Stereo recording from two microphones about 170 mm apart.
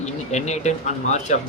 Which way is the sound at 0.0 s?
40° left (ahead or behind).